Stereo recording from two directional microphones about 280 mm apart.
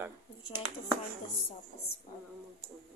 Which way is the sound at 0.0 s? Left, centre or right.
Centre.